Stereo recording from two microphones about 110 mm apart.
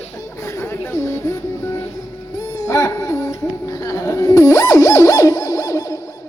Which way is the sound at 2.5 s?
30° left (ahead or behind).